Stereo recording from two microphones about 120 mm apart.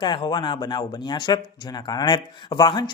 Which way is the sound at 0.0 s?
40° left (ahead or behind).